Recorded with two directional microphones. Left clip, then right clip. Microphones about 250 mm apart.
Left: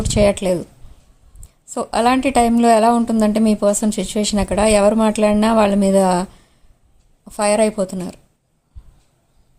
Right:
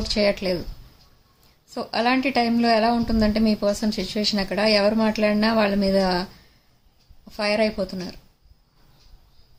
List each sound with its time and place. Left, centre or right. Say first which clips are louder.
0.0 s a woman's voice: left 6 dB; left
1.7 s a woman's voice: left 6 dB; left
7.3 s a woman's voice: left 6 dB; left